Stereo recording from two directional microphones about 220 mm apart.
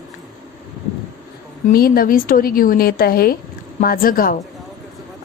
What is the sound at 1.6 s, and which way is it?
A woman's voice, 40° left (ahead or behind).